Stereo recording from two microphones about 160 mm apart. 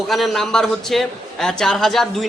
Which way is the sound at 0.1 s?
Centre (ahead or behind).